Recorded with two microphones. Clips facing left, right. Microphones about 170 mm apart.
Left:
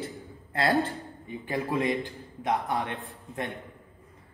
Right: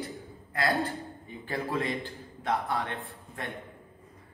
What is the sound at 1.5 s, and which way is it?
Speech, 15° left (ahead or behind).